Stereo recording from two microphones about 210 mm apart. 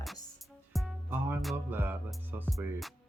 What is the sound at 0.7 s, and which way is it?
Music, 5° right (ahead or behind).